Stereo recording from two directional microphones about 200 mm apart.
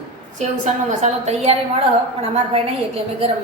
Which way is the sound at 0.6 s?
35° right (ahead or behind).